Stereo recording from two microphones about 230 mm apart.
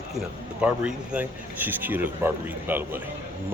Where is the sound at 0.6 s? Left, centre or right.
Centre.